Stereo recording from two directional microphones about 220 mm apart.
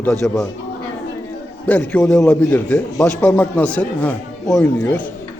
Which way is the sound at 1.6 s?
5° left (ahead or behind).